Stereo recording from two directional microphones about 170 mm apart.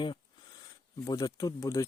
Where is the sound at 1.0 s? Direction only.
20° left (ahead or behind).